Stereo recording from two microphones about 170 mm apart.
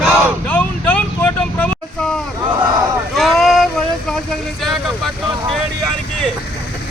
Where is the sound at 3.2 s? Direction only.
Centre (ahead or behind).